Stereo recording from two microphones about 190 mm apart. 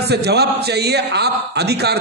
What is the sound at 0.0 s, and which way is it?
A man's voice, 60° right (ahead or behind).